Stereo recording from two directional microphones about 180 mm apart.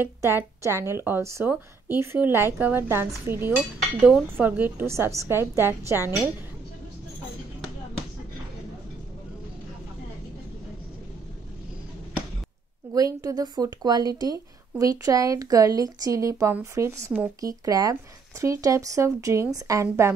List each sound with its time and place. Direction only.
0.0 s a woman's voice: 10° right (ahead or behind)
12.9 s a woman's voice: 20° right (ahead or behind)